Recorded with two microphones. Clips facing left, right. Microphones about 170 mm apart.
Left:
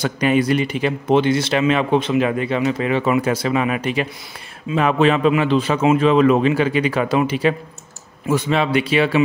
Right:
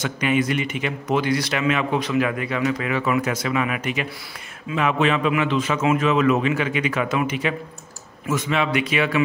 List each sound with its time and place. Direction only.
0.0 s a man's voice: 35° left (ahead or behind)